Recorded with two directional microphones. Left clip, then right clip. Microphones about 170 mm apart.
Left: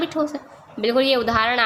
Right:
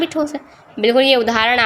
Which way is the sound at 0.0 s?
15° right (ahead or behind).